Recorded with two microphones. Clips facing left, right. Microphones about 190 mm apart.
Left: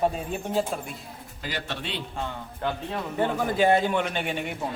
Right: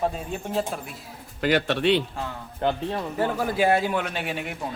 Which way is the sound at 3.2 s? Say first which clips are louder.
Left 1 dB; 5° right (ahead or behind).